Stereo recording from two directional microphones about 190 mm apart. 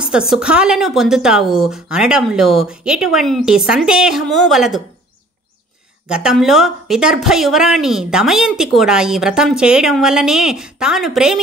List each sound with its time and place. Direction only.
0.0 s speech: 5° right (ahead or behind)
6.0 s speech: 5° right (ahead or behind)